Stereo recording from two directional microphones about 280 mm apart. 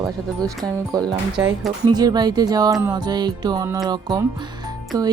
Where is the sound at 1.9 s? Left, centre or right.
Centre.